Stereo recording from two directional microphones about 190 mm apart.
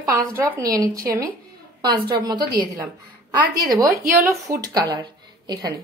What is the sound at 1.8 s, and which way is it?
Speech, 20° right (ahead or behind).